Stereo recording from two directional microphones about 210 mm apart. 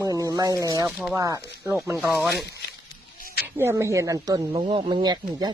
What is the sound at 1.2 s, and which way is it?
Speech, 15° right (ahead or behind).